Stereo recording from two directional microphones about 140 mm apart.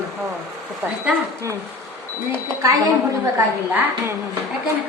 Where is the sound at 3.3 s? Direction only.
15° right (ahead or behind).